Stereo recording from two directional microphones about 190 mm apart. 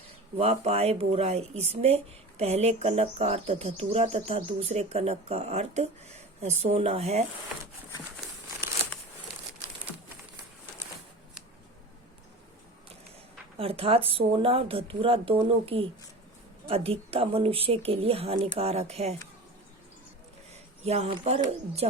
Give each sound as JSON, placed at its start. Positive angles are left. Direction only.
{"t": 0.3, "sound": "speech", "side_deg": -35}
{"t": 13.6, "sound": "speech", "side_deg": -30}
{"t": 20.5, "sound": "speech", "side_deg": -35}